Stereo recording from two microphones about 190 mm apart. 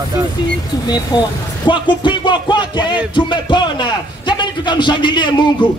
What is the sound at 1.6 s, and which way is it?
A man's voice, 25° left (ahead or behind).